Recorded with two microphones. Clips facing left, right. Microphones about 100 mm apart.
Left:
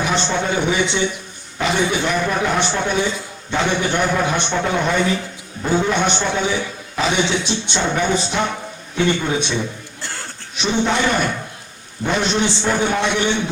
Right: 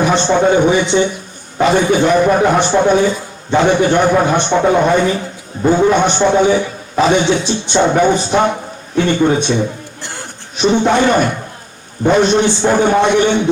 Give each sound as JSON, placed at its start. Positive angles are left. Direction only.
{"t": 0.0, "sound": "a man's voice", "side_deg": -40}
{"t": 10.0, "sound": "a sound", "side_deg": -20}
{"t": 10.6, "sound": "a man's voice", "side_deg": -45}